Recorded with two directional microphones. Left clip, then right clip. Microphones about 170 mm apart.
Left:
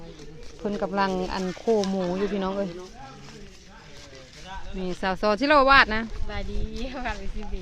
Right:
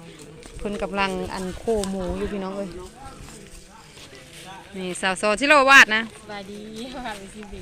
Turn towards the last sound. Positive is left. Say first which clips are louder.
# even
turn(degrees=0)  # may be behind; listen again after turning